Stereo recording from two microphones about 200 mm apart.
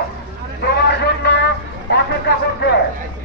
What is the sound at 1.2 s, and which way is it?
Vehicle, 60° left (ahead or behind).